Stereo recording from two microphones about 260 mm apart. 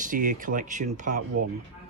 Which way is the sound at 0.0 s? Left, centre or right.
Right.